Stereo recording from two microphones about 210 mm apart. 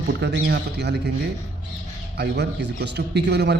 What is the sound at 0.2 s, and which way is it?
Speech, 55° right (ahead or behind).